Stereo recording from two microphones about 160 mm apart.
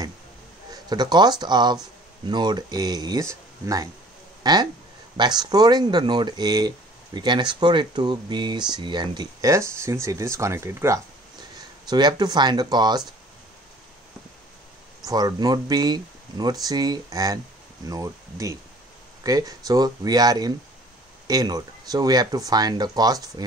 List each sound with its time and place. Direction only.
0.8 s speech: 25° right (ahead or behind)
15.0 s speech: 25° right (ahead or behind)